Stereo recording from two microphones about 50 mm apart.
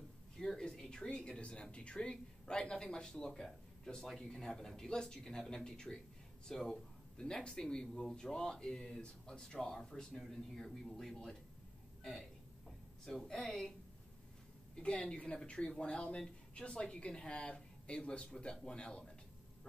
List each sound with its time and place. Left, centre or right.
0.4 s a sound: centre
1.0 s a man's voice: centre
12.6 s a woman's voice: centre
14.8 s speech: centre